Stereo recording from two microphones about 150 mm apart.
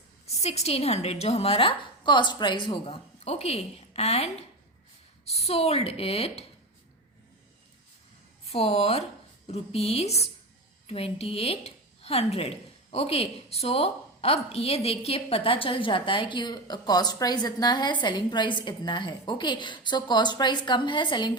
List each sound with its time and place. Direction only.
0.3 s a woman's voice: 45° left (ahead or behind)
8.4 s a woman's voice: 40° left (ahead or behind)